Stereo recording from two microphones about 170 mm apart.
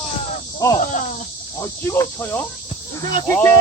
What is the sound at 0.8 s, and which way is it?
Snake, 50° left (ahead or behind).